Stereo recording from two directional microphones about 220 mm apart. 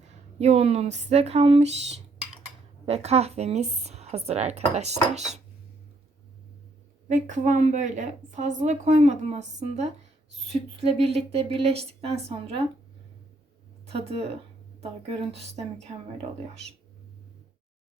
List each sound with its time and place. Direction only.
0.3 s speech: 30° right (ahead or behind)
7.1 s a woman's voice: 35° right (ahead or behind)
13.8 s speech: 25° right (ahead or behind)